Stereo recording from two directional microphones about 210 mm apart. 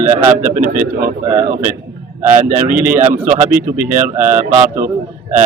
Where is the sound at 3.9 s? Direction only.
35° right (ahead or behind).